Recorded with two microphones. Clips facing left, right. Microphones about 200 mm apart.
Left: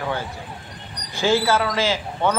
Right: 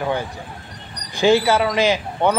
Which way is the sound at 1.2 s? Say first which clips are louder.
Right 4 dB; 15° right (ahead or behind).